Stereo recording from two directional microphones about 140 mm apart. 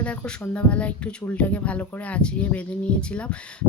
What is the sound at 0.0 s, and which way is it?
Speech, 10° left (ahead or behind).